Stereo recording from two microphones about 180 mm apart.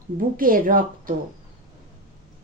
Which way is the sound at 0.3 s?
50° right (ahead or behind).